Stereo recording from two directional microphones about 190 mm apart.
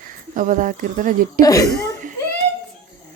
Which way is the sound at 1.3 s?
20° left (ahead or behind).